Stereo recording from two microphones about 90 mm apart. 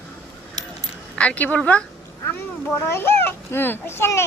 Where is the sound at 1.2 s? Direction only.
15° left (ahead or behind).